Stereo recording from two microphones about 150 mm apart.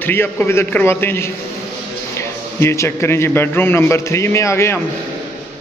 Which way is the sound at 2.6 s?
20° left (ahead or behind).